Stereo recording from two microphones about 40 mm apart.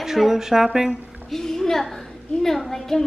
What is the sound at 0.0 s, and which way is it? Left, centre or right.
Speech, centre.